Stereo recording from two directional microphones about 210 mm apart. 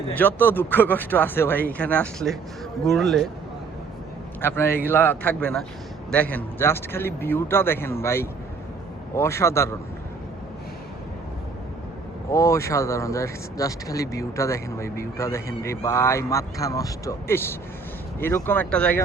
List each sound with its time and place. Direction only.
0.1 s speech: 10° left (ahead or behind)
4.4 s a man's voice: 10° left (ahead or behind)
12.3 s speech: 15° left (ahead or behind)